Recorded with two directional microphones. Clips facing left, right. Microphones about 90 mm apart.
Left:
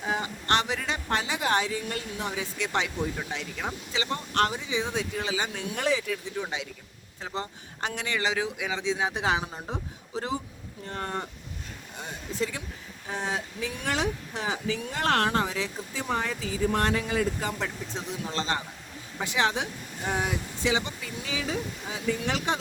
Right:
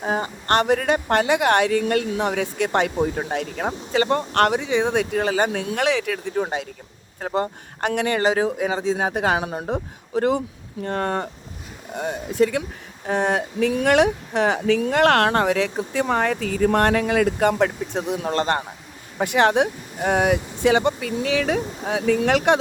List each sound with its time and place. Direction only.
0.0 s a woman's voice: 45° right (ahead or behind); by 22.5 s 65° right (ahead or behind)